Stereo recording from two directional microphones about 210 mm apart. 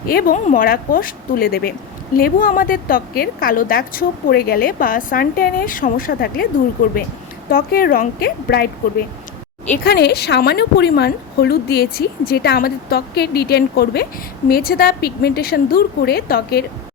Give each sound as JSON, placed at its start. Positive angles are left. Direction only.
{"t": 0.1, "sound": "a woman's voice", "side_deg": 45}
{"t": 7.5, "sound": "a woman's voice", "side_deg": 45}
{"t": 9.8, "sound": "a woman's voice", "side_deg": 50}